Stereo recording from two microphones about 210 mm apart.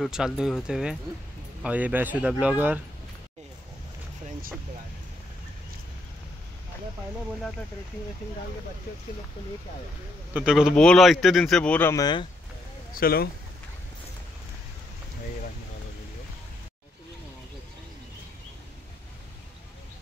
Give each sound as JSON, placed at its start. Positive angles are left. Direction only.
{"t": 0.0, "sound": "speech", "side_deg": -5}
{"t": 10.3, "sound": "speech", "side_deg": -5}
{"t": 12.9, "sound": "speech", "side_deg": 45}